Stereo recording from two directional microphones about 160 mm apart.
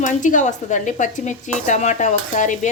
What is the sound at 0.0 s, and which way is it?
Speech, 50° left (ahead or behind).